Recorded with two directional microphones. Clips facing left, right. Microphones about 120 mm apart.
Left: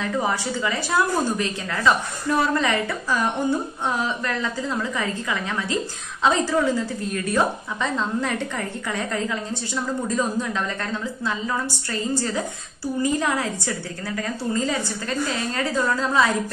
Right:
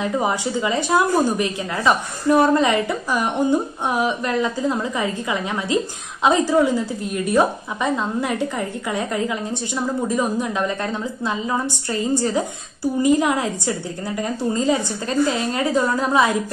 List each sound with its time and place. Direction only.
0.0 s a woman's voice: 15° right (ahead or behind)